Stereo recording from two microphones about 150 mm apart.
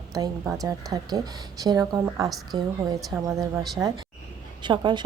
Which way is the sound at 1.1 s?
25° right (ahead or behind).